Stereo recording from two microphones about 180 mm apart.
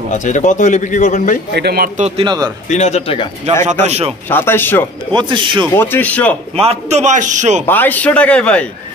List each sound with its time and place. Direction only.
0.1 s a man's voice: 45° left (ahead or behind)
1.5 s speech: 65° right (ahead or behind)
2.0 s a man's voice: 35° right (ahead or behind)
2.2 s speech: 20° right (ahead or behind)
2.7 s speech: 40° left (ahead or behind)
3.8 s a man's voice: 35° right (ahead or behind)
4.3 s speech: 10° left (ahead or behind)
5.1 s speech: 25° right (ahead or behind)
5.8 s speech: 10° left (ahead or behind)
6.5 s a man's voice: 35° right (ahead or behind)
7.6 s speech: 10° left (ahead or behind)